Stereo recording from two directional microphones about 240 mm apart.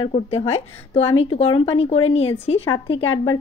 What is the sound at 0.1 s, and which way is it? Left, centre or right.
Speech, left.